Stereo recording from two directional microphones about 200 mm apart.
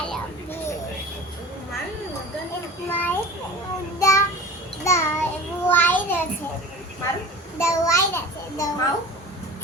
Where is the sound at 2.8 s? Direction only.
10° left (ahead or behind).